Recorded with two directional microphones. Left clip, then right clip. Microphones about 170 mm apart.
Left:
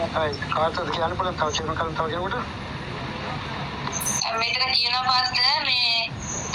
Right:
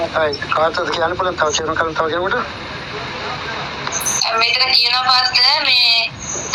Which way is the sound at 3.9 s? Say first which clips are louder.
Right 8 dB; 30° right (ahead or behind).